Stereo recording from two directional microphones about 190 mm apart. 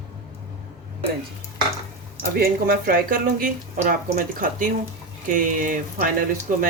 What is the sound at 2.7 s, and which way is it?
Speech, 50° right (ahead or behind).